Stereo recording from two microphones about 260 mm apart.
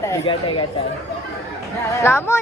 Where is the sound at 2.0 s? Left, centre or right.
Centre.